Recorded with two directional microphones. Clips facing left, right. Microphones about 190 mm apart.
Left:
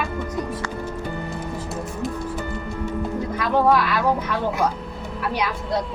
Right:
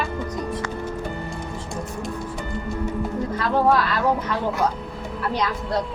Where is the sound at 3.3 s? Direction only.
10° left (ahead or behind).